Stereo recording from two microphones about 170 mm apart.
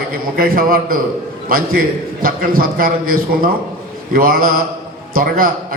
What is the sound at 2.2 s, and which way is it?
A man's voice, 60° right (ahead or behind).